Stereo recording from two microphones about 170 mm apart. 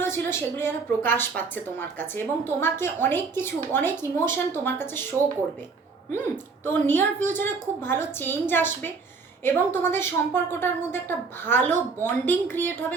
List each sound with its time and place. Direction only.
0.0 s a woman's voice: 15° left (ahead or behind)
6.1 s a woman's voice: 15° left (ahead or behind)
7.2 s a woman's voice: 50° right (ahead or behind)
7.4 s a woman's voice: 15° left (ahead or behind)